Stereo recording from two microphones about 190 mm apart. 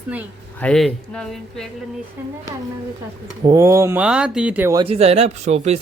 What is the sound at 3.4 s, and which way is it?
Speech, 15° right (ahead or behind).